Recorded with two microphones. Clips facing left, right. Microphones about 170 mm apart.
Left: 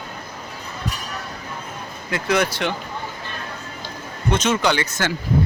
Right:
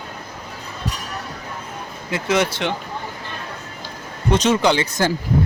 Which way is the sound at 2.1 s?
20° right (ahead or behind).